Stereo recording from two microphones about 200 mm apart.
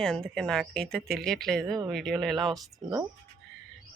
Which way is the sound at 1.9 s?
Centre (ahead or behind).